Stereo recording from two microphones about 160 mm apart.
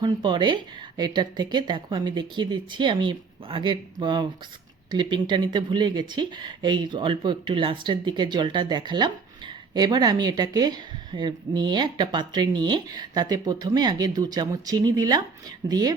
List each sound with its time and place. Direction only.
0.0 s speech: 30° right (ahead or behind)